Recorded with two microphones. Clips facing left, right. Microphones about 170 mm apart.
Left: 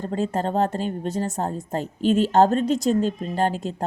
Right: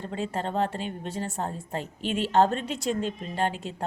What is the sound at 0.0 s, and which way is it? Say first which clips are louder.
A woman's voice: left 6 dB; 40° left (ahead or behind).